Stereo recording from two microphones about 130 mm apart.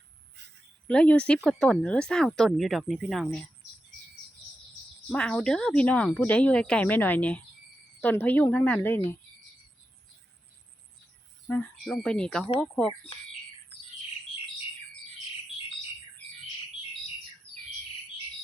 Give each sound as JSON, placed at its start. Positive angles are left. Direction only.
{"t": 0.9, "sound": "speech", "side_deg": 10}
{"t": 5.0, "sound": "speech", "side_deg": 5}
{"t": 11.4, "sound": "speech", "side_deg": 10}